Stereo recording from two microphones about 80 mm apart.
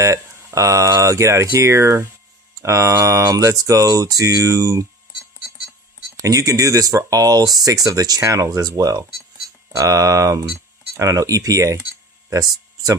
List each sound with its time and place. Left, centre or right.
0.0 s speech: right
6.2 s speech: right